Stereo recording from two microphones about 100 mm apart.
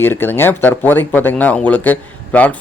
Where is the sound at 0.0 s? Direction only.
20° left (ahead or behind).